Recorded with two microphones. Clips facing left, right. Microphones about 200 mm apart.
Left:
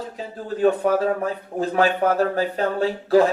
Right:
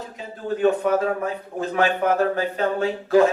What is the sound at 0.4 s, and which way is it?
Speech, 35° left (ahead or behind).